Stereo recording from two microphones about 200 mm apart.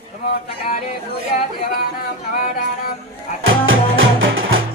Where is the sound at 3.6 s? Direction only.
75° right (ahead or behind).